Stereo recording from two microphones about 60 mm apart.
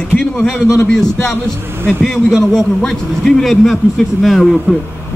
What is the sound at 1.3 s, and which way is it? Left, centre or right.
Speech, right.